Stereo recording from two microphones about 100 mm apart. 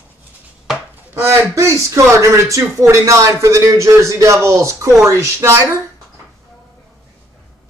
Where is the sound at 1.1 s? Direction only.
25° right (ahead or behind).